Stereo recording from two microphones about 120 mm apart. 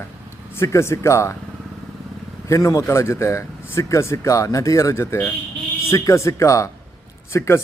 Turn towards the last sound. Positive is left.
turn(degrees=20)  # may be behind; listen again after turning